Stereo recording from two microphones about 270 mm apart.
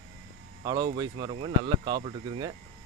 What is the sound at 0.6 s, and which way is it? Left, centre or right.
Speech, centre.